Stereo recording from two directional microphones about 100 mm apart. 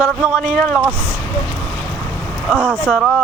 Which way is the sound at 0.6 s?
5° left (ahead or behind).